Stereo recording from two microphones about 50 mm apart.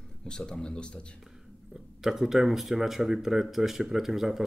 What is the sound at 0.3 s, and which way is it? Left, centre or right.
Speech, centre.